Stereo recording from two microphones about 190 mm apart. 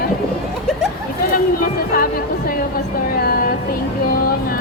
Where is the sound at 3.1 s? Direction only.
50° left (ahead or behind).